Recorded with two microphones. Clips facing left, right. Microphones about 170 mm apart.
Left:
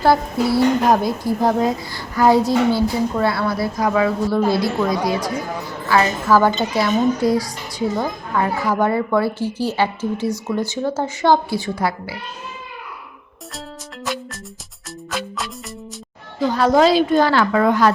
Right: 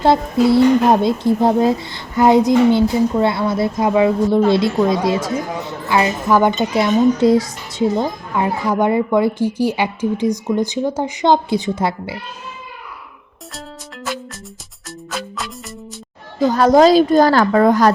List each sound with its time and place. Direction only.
0.0 s a woman's voice: 20° right (ahead or behind)
14.8 s music: centre (ahead or behind)
16.4 s a woman's voice: 45° right (ahead or behind)